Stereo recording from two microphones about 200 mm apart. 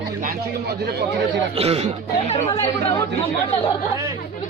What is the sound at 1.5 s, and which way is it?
Speech, 30° right (ahead or behind).